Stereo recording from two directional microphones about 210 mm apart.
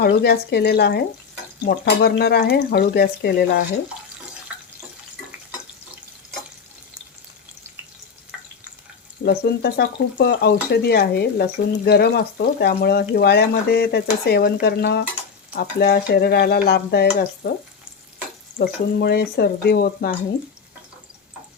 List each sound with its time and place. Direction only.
0.0 s speech: 50° left (ahead or behind)
9.2 s speech: 50° left (ahead or behind)
18.9 s speech: 50° left (ahead or behind)